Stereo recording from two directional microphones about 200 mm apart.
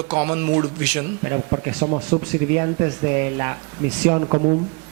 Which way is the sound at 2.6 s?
15° right (ahead or behind).